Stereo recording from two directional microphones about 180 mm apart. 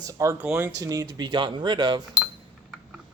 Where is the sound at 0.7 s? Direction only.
20° right (ahead or behind).